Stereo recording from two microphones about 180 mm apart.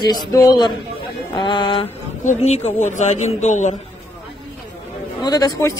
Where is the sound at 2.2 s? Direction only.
40° left (ahead or behind).